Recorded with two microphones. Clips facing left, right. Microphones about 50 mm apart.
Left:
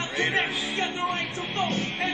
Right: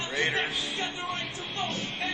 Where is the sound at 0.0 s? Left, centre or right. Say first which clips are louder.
Left 3 dB; left.